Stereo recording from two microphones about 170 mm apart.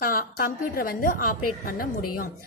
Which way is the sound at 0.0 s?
60° left (ahead or behind).